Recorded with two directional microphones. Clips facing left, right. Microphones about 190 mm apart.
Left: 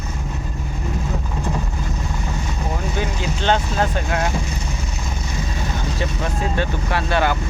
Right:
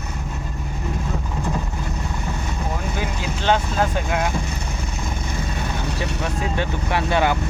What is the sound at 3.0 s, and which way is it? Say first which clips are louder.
Vehicle: left 1 dB; 10° right (ahead or behind).